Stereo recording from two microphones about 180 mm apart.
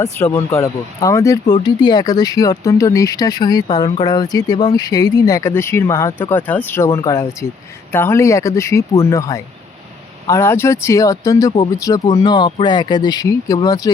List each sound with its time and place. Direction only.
0.0 s speech: 15° left (ahead or behind)